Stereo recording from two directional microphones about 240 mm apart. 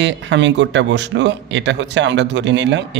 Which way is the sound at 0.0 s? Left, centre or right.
Right.